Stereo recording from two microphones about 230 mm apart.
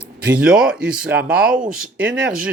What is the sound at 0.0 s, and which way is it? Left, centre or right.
Speech, centre.